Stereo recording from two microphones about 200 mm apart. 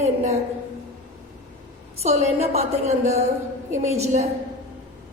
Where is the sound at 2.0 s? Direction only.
30° right (ahead or behind).